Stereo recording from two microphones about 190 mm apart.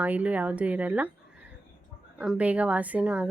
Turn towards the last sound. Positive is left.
turn(degrees=-5)  # may be behind; listen again after turning